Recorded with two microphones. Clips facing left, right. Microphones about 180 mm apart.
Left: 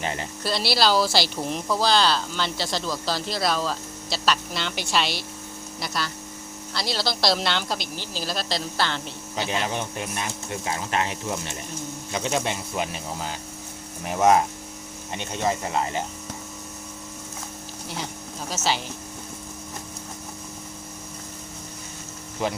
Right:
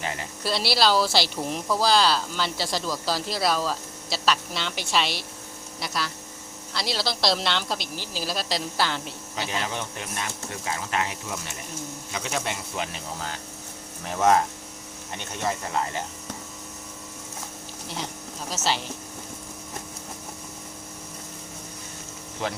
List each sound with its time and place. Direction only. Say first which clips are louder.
0.0 s a sound: left 3 dB; 30° left (ahead or behind)
0.4 s speech: even; centre (ahead or behind)
9.3 s speech: left 3 dB; 20° left (ahead or behind)
12.7 s speech: left 3 dB; 15° left (ahead or behind)
18.5 s speech: left 1 dB; centre (ahead or behind)